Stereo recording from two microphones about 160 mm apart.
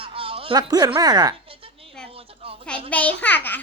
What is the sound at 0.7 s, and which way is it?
Speech, 25° right (ahead or behind).